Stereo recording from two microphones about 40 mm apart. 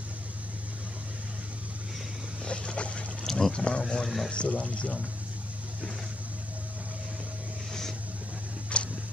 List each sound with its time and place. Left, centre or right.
2.4 s boat: left
3.3 s boat: centre
3.5 s a sound: left
4.0 s speech: centre
4.3 s speech: left
8.7 s a sound: left